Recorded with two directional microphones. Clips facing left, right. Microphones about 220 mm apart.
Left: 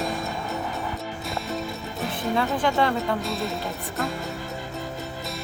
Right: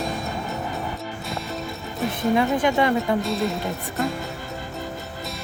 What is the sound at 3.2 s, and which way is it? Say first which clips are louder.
Speech: right 4 dB; centre (ahead or behind).